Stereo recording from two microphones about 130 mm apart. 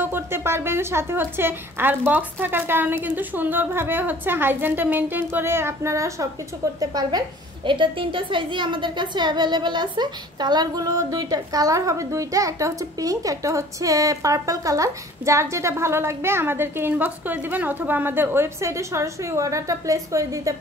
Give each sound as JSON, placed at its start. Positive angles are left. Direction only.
{"t": 0.0, "sound": "a woman's voice", "side_deg": -15}